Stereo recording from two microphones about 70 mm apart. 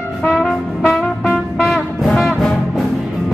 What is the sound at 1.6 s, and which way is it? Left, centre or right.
Music, centre.